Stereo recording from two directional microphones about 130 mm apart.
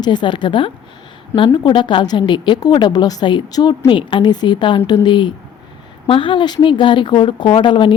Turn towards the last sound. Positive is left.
turn(degrees=40)  # may be behind; listen again after turning